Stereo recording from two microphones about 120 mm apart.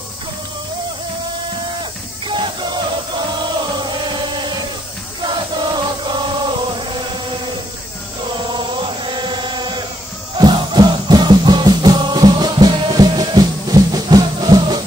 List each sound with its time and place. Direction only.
1.8 s music: 40° right (ahead or behind)
5.2 s chant: 40° right (ahead or behind)
8.5 s chant: 40° right (ahead or behind)
10.3 s music: 40° right (ahead or behind)